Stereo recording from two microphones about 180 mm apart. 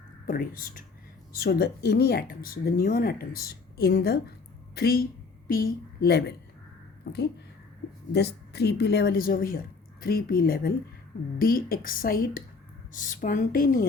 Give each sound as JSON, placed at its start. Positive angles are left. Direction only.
{"t": 0.3, "sound": "a woman's voice", "side_deg": 50}